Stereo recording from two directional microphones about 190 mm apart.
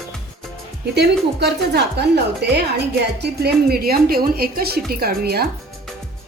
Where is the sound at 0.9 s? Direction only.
60° right (ahead or behind).